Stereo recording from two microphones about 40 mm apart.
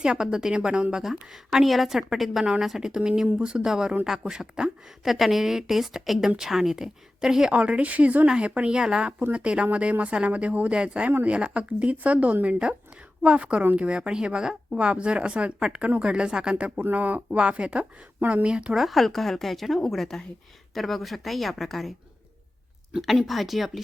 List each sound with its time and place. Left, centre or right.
0.0 s a woman's voice: centre
1.6 s a woman's voice: centre; by 4.7 s right
5.0 s a woman's voice: centre
7.5 s speech: right
16.9 s speech: right
17.2 s speech: right
18.8 s speech: centre
23.0 s speech: centre